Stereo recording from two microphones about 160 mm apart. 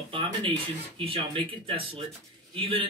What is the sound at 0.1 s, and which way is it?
Speech, 30° right (ahead or behind).